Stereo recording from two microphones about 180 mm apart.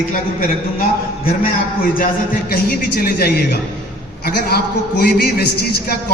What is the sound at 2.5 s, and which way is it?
A man's voice, 55° left (ahead or behind).